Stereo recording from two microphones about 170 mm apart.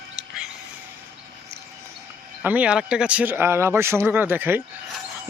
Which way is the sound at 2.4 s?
10° right (ahead or behind).